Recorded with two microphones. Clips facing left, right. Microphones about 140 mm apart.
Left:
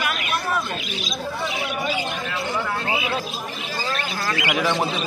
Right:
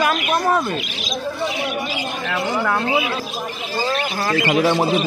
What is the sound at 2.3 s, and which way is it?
Speech, 65° right (ahead or behind).